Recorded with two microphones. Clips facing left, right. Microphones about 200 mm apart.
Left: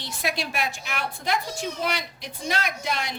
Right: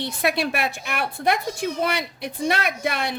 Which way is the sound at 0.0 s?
60° right (ahead or behind).